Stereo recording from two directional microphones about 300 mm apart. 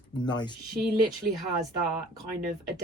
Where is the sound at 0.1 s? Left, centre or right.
Centre.